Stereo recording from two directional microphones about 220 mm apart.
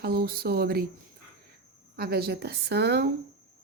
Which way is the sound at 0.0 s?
45° right (ahead or behind).